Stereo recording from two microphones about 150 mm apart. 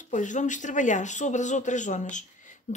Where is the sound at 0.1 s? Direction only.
55° left (ahead or behind).